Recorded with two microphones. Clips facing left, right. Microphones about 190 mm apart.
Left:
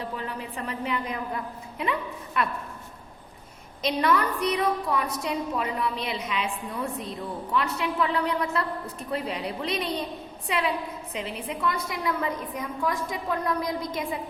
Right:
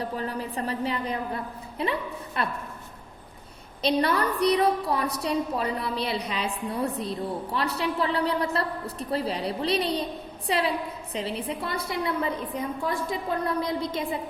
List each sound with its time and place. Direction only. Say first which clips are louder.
0.0 s a woman's voice: right 3 dB; 40° right (ahead or behind)
3.8 s a woman's voice: right 1 dB; 35° right (ahead or behind)